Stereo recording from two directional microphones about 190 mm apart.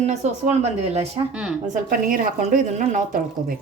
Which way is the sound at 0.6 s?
35° right (ahead or behind).